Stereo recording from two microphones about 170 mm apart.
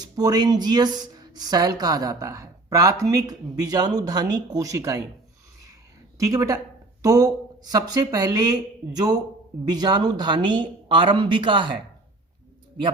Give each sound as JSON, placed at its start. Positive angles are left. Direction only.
{"t": 0.0, "sound": "a woman's voice", "side_deg": -25}
{"t": 6.1, "sound": "a woman's voice", "side_deg": -20}